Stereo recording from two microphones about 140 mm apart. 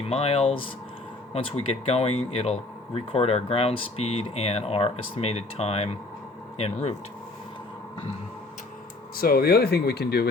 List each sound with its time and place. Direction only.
0.1 s speech: 45° left (ahead or behind)
9.1 s speech: 90° left